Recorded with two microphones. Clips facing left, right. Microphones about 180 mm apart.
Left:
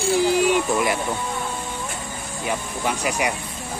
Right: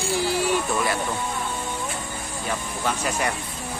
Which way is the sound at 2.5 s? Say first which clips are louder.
Left 2 dB; 15° left (ahead or behind).